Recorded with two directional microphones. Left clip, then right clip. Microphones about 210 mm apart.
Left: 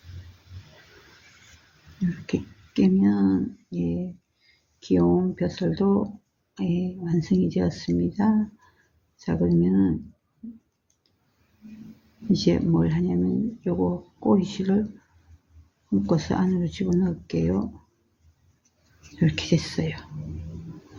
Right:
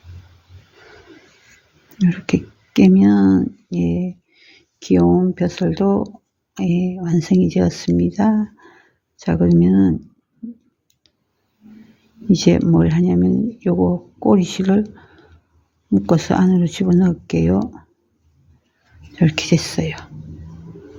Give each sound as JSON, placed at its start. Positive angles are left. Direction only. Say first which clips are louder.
{"t": 2.2, "sound": "speech", "louder": "right 9 dB", "side_deg": -50}
{"t": 12.3, "sound": "speech", "louder": "right 8 dB", "side_deg": -50}
{"t": 16.0, "sound": "speech", "louder": "right 9 dB", "side_deg": -50}
{"t": 19.2, "sound": "speech", "louder": "right 7 dB", "side_deg": -45}